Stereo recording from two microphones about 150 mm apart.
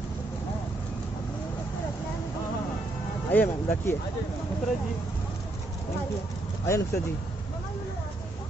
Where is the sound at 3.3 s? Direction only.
10° left (ahead or behind).